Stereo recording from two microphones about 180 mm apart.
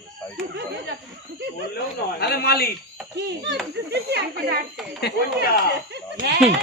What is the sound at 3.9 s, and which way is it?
Speech, 65° right (ahead or behind).